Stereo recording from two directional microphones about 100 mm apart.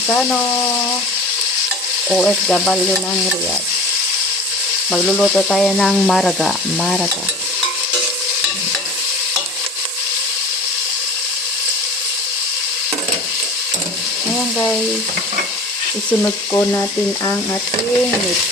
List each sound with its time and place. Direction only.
2.0 s frying: 5° right (ahead or behind)
4.9 s frying: centre (ahead or behind)
16.5 s speech: 25° left (ahead or behind)